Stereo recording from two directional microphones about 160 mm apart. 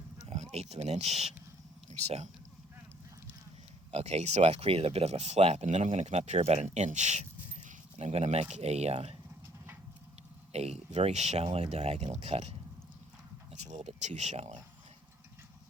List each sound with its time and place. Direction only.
0.3 s speech: 45° right (ahead or behind)
3.9 s speech: 40° right (ahead or behind)
10.5 s speech: 40° right (ahead or behind)